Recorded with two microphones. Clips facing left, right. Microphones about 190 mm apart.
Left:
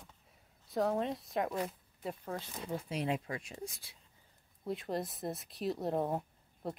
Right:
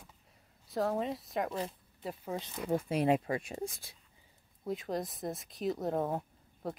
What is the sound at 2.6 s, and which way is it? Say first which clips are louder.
Speech: right 7 dB; 50° right (ahead or behind).